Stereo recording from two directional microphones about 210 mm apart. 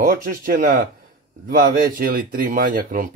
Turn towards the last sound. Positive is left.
turn(degrees=-40)  # may be behind; listen again after turning